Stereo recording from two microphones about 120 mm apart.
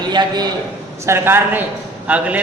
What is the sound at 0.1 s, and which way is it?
Speech, 35° right (ahead or behind).